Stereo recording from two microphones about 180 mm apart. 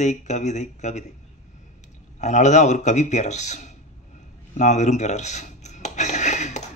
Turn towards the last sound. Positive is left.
turn(degrees=40)  # may be behind; listen again after turning